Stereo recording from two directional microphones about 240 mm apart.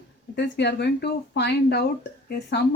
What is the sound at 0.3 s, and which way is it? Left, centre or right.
A woman's voice, left.